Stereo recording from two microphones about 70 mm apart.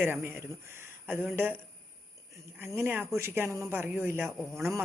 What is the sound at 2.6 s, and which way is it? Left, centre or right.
Speech, right.